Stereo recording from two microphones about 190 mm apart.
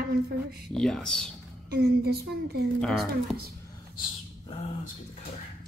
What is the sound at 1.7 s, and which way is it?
Speech, 55° right (ahead or behind).